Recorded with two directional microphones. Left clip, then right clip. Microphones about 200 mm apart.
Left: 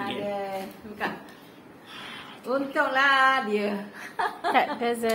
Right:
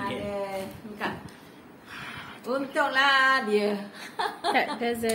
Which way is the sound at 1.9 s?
20° right (ahead or behind).